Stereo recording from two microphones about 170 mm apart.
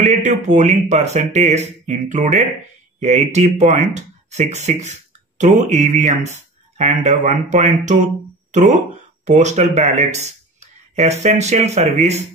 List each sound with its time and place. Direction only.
0.0 s speech: 45° right (ahead or behind)